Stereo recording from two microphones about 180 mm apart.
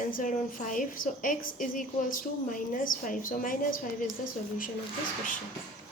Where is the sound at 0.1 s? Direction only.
45° left (ahead or behind).